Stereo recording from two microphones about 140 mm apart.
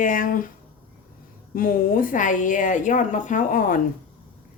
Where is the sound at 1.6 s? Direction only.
90° left.